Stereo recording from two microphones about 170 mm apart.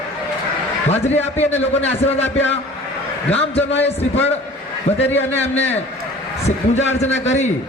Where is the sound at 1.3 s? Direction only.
40° left (ahead or behind).